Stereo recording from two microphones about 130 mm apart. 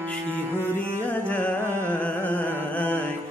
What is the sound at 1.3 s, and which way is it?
Music, 10° left (ahead or behind).